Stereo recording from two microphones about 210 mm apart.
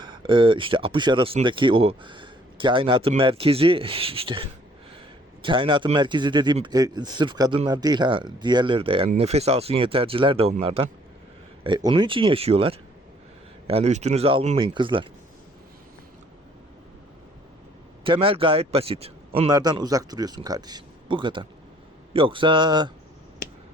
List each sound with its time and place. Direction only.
0.0 s speech: 20° right (ahead or behind)
18.0 s speech: 25° right (ahead or behind)